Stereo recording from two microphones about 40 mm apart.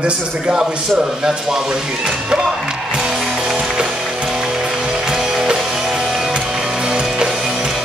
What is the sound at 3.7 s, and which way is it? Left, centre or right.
Music, right.